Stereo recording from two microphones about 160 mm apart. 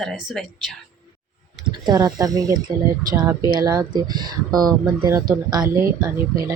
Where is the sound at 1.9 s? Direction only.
25° right (ahead or behind).